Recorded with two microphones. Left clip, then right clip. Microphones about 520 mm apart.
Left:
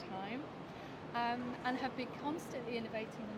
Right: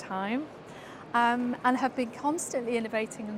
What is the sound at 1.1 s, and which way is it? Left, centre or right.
A woman's voice, right.